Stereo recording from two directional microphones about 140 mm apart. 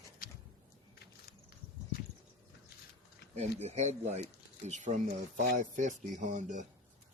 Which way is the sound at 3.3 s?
50° right (ahead or behind).